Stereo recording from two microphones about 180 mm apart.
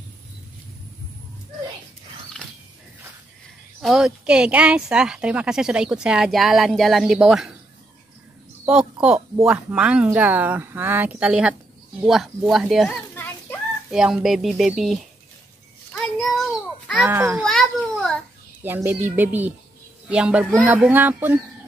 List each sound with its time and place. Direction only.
3.8 s speech: 5° right (ahead or behind)
9.5 s a woman's voice: 5° right (ahead or behind)
13.1 s a sound: 10° left (ahead or behind)
13.8 s speech: centre (ahead or behind)
15.9 s a sound: centre (ahead or behind)
17.0 s a woman's voice: 10° right (ahead or behind)
17.4 s a child's voice: centre (ahead or behind)
18.6 s a woman's voice: 10° right (ahead or behind)